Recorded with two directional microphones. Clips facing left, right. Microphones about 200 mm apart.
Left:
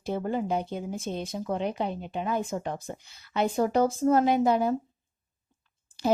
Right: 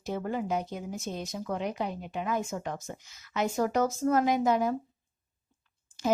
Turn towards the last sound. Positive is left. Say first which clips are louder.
# left 3 dB
turn(degrees=30)  # may be behind; listen again after turning